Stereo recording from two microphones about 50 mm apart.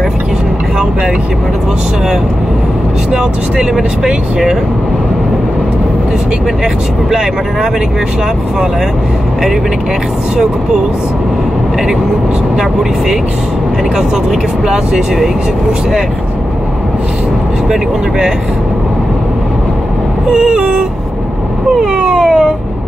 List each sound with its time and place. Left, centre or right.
3.1 s speech: centre
20.2 s speech: centre
21.9 s a sound: centre